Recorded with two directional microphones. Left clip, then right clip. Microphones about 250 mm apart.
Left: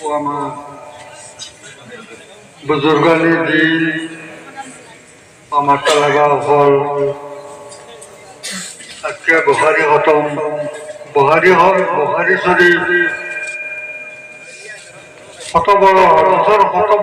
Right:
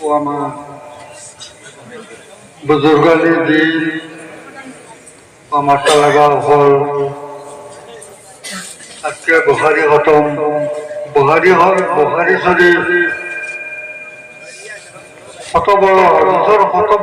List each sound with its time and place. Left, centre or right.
0.1 s a man's voice: centre
2.6 s a man's voice: centre
5.5 s a man's voice: centre
9.0 s a man's voice: centre
15.5 s a man's voice: centre